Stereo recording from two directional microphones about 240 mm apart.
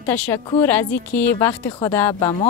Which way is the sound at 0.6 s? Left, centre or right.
Centre.